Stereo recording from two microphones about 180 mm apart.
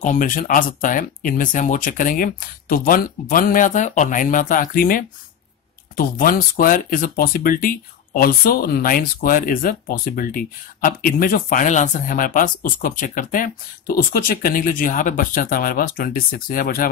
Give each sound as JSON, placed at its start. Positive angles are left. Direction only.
{"t": 0.0, "sound": "speech", "side_deg": 45}